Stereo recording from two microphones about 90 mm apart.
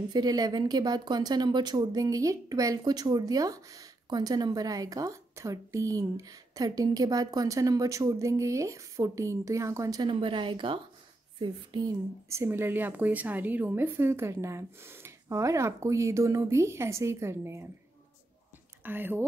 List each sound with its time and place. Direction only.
0.1 s speech: 45° right (ahead or behind)
10.0 s a woman's voice: 70° right (ahead or behind); by 12.0 s 50° right (ahead or behind)
12.3 s a woman's voice: 30° right (ahead or behind)
18.8 s speech: 25° right (ahead or behind)